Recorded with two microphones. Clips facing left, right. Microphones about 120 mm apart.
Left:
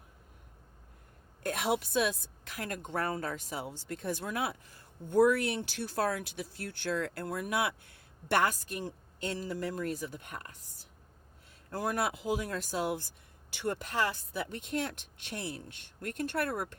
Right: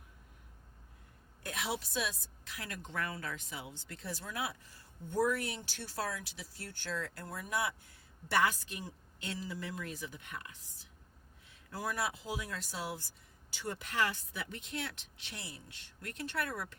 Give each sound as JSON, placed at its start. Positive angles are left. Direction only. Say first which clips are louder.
{"t": 1.5, "sound": "a woman's voice", "louder": "left 7 dB", "side_deg": 50}
{"t": 11.7, "sound": "a woman's voice", "louder": "left 5 dB", "side_deg": 55}
{"t": 13.7, "sound": "speech", "louder": "left 2 dB", "side_deg": 35}